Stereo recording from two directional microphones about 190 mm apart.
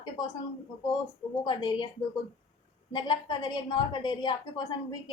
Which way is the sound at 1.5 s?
25° left (ahead or behind).